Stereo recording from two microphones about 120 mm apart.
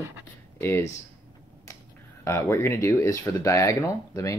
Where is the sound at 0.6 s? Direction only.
20° left (ahead or behind).